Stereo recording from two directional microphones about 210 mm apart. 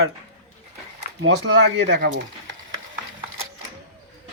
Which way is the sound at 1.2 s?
60° right (ahead or behind).